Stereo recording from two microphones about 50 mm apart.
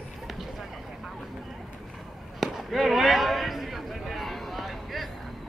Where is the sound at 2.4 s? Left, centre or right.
Centre.